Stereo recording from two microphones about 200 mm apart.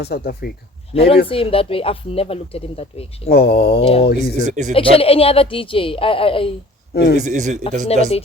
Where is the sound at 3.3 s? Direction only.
50° left (ahead or behind).